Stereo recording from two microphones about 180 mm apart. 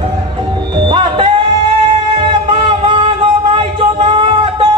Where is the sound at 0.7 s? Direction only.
30° right (ahead or behind).